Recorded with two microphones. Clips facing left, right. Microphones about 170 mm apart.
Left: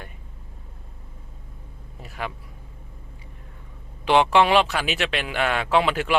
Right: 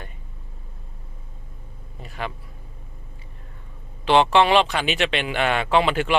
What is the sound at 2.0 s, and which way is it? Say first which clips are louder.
Speech: right 1 dB; 5° left (ahead or behind).